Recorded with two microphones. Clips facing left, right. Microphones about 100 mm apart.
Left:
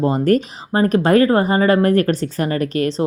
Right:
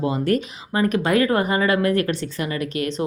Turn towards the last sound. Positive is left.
turn(degrees=35)  # may be behind; listen again after turning